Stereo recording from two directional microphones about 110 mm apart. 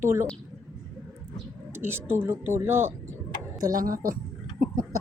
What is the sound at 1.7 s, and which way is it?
Speech, 20° right (ahead or behind).